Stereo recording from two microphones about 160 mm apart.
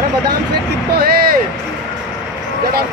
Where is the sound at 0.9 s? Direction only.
75° right (ahead or behind).